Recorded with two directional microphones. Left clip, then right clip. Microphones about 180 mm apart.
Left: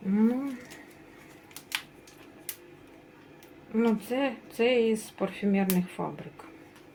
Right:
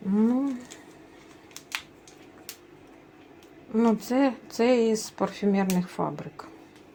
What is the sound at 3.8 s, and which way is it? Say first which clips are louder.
A woman's voice: right 4 dB; 40° right (ahead or behind).